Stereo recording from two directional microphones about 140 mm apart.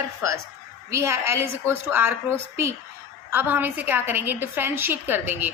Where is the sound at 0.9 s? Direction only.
20° right (ahead or behind).